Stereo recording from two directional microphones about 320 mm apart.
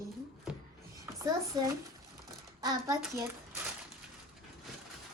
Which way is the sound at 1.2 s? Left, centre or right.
Centre.